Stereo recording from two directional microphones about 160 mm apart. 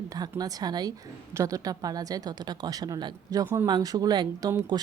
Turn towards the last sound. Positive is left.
turn(degrees=-25)  # may be behind; listen again after turning